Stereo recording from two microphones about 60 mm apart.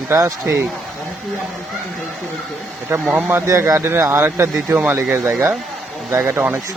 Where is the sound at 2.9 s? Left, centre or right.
Right.